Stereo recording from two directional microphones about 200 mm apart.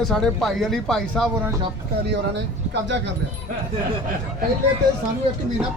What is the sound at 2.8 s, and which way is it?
Speech, 65° right (ahead or behind).